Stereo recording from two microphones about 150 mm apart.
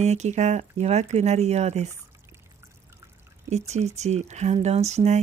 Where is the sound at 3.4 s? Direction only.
50° right (ahead or behind).